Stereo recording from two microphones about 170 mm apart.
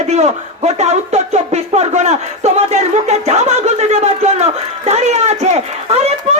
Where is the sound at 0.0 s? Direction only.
40° right (ahead or behind).